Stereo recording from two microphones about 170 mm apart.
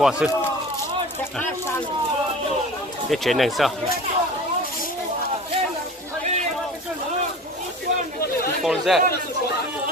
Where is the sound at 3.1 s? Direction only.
Centre (ahead or behind).